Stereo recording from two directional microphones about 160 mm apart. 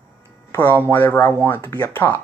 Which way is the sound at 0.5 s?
15° left (ahead or behind).